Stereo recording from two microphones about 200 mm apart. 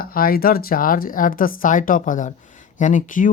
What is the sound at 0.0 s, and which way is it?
Speech, 45° left (ahead or behind).